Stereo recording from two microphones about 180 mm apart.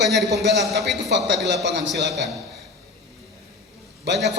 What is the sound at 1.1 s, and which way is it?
A man's voice, 75° right (ahead or behind).